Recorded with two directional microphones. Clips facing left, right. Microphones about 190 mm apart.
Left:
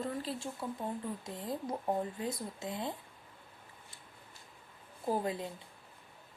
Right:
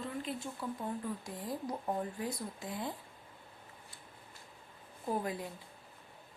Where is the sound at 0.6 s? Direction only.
25° left (ahead or behind).